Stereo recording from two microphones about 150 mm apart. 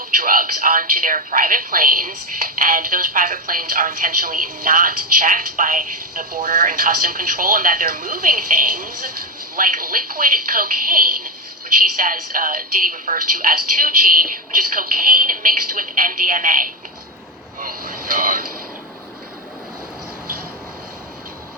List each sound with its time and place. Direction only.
0.0 s speech: 70° right (ahead or behind)